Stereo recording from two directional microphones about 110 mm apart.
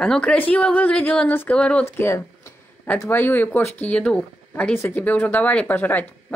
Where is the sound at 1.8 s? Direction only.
25° left (ahead or behind).